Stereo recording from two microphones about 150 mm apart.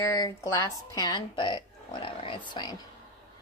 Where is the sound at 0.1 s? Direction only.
20° left (ahead or behind).